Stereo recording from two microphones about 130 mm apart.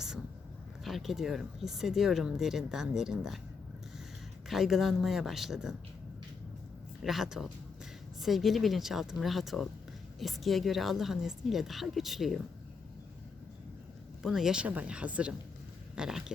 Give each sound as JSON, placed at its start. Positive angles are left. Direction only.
{"t": 0.9, "sound": "speech", "side_deg": 0}
{"t": 4.4, "sound": "speech", "side_deg": 0}
{"t": 7.0, "sound": "speech", "side_deg": 0}
{"t": 14.2, "sound": "speech", "side_deg": -5}